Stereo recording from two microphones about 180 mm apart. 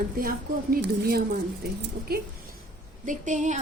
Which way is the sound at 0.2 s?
55° right (ahead or behind).